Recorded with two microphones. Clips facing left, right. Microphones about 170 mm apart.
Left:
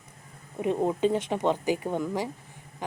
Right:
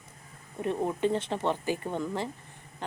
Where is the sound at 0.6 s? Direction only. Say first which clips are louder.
Left 3 dB; 15° left (ahead or behind).